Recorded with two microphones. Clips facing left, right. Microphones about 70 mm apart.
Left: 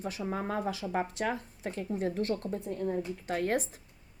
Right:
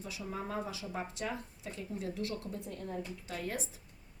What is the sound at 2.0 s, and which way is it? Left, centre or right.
Speech, left.